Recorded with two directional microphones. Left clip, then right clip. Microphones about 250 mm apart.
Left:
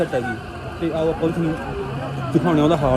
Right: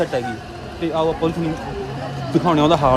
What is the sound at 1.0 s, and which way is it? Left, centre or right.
Speech, right.